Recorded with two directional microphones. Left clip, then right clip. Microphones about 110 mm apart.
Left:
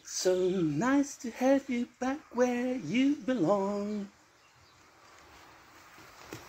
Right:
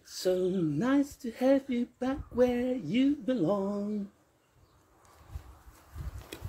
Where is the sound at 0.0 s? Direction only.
90° right.